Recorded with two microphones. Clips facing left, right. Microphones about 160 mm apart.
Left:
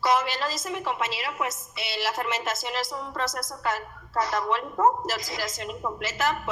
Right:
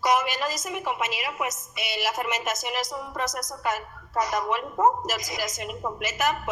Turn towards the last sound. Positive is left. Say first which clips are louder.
# right 1 dB
turn(degrees=-20)  # may be behind; listen again after turning